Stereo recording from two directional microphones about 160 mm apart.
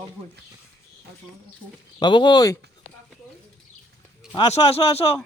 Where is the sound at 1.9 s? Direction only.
30° left (ahead or behind).